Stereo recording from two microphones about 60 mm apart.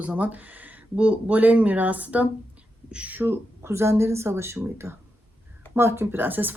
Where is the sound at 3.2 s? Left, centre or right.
Right.